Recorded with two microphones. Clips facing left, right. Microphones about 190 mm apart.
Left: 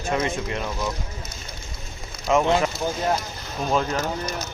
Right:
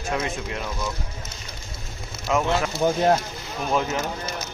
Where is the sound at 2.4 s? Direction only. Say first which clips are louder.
Left 3 dB; 15° left (ahead or behind).